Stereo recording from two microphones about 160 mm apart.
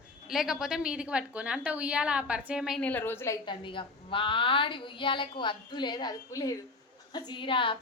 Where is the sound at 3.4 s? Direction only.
30° left (ahead or behind).